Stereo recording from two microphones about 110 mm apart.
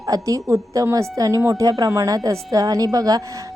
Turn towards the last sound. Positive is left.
turn(degrees=-35)  # may be behind; listen again after turning